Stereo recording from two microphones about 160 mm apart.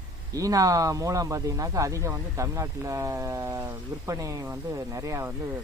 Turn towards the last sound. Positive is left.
turn(degrees=-20)  # may be behind; listen again after turning